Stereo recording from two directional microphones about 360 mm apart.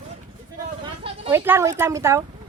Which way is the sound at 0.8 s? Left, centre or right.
Centre.